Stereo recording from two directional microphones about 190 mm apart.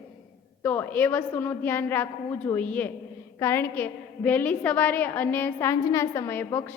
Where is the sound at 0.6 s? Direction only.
10° left (ahead or behind).